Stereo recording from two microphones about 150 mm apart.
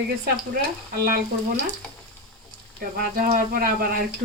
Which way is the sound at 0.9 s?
80° right.